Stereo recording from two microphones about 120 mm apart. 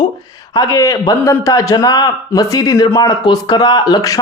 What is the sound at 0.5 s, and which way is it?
Speech, 30° left (ahead or behind).